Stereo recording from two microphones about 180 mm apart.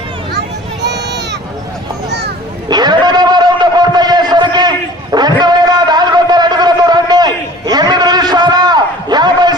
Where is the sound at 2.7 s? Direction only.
25° right (ahead or behind).